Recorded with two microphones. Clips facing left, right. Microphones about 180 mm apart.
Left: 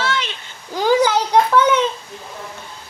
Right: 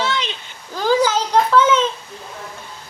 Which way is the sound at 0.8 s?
15° left (ahead or behind).